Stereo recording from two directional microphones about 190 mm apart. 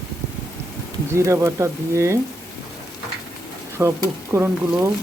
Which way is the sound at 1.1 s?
15° right (ahead or behind).